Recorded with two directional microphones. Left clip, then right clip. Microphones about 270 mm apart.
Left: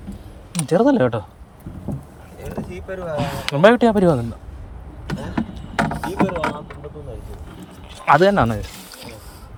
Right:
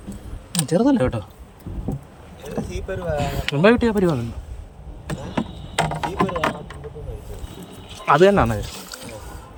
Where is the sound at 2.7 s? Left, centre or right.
Centre.